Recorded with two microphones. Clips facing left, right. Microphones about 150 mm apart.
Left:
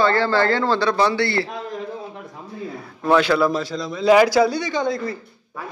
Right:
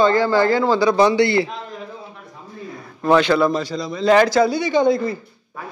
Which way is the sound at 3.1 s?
5° left (ahead or behind).